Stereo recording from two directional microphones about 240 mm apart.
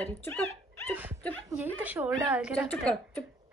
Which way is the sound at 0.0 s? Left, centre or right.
Centre.